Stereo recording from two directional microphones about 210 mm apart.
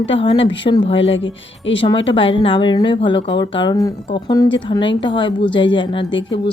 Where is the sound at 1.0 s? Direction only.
60° left (ahead or behind).